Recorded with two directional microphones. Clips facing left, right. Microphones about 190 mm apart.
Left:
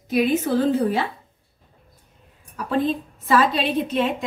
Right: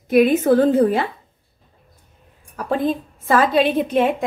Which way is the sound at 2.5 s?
50° right (ahead or behind).